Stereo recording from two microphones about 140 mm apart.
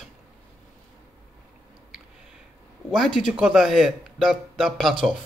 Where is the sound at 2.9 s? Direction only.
Centre (ahead or behind).